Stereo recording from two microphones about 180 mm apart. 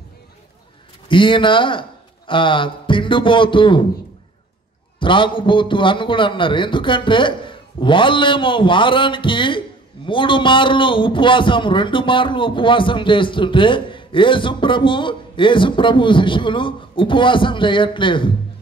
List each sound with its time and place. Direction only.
1.0 s speech: 30° left (ahead or behind)
4.9 s a man's voice: 30° left (ahead or behind)